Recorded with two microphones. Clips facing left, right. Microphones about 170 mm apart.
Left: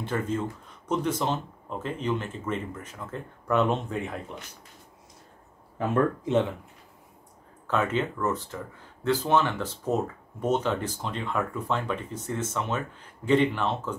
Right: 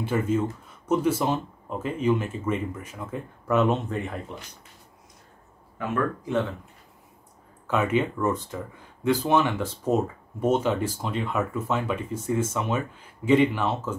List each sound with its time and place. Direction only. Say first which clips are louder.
0.0 s speech: right 4 dB; 10° right (ahead or behind)
5.8 s speech: left 2 dB; 25° left (ahead or behind)
7.6 s speech: right 3 dB; 10° right (ahead or behind)